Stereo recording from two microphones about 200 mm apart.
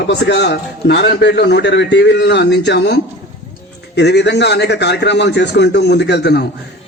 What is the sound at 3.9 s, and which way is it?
A man's voice, 55° left (ahead or behind).